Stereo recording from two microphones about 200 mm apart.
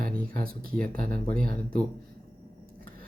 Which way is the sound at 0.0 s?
45° right (ahead or behind).